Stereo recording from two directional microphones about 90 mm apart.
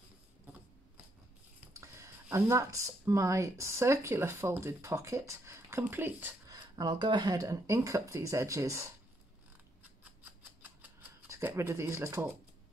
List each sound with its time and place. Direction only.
2.3 s speech: 35° right (ahead or behind)
6.5 s speech: 50° right (ahead or behind); by 8.8 s 35° right (ahead or behind)
10.6 s a sound: 15° right (ahead or behind)
11.2 s speech: 30° right (ahead or behind)